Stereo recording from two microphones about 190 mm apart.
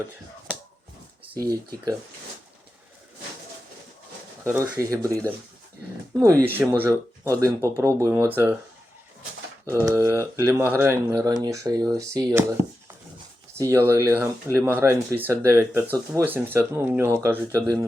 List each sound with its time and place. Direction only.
1.3 s speech: 20° right (ahead or behind)
4.4 s speech: 15° right (ahead or behind)
9.6 s speech: 15° right (ahead or behind)
13.6 s speech: 15° right (ahead or behind)